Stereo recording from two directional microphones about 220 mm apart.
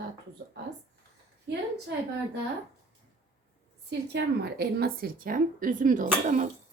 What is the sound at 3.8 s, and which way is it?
A woman's voice, 50° right (ahead or behind).